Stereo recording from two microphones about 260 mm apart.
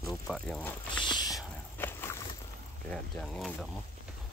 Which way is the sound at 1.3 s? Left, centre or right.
Centre.